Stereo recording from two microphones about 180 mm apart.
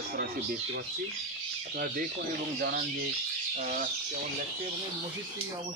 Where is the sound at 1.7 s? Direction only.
50° right (ahead or behind).